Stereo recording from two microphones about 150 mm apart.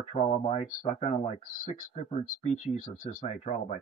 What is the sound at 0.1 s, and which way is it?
Speech, 40° left (ahead or behind).